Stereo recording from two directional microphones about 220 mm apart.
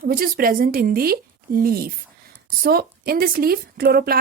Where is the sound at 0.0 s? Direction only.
40° right (ahead or behind).